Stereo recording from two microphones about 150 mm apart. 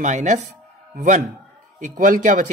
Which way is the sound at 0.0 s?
55° right (ahead or behind).